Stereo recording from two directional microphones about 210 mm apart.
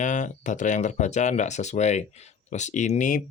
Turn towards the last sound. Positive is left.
turn(degrees=35)  # may be behind; listen again after turning